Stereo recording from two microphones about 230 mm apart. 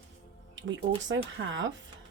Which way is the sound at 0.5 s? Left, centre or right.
Right.